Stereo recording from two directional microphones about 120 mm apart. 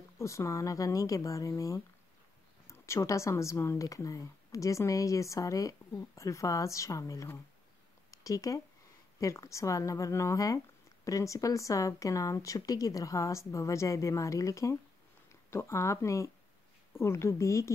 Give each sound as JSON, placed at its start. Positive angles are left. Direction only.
{"t": 0.2, "sound": "speech", "side_deg": 25}